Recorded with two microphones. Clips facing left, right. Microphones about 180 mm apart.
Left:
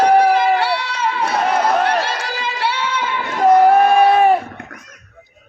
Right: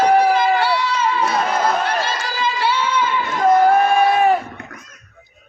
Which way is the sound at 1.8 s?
65° left (ahead or behind).